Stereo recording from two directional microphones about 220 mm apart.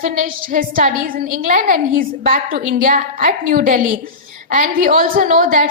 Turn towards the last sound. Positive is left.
turn(degrees=-35)  # may be behind; listen again after turning